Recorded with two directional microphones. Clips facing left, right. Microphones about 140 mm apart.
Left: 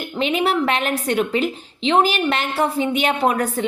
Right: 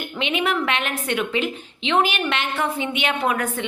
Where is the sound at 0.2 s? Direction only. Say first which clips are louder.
Left 4 dB; 40° left (ahead or behind).